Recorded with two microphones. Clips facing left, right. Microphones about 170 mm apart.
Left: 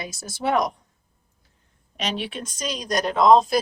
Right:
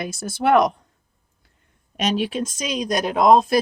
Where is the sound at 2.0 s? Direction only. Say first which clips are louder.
Right 7 dB; 45° right (ahead or behind).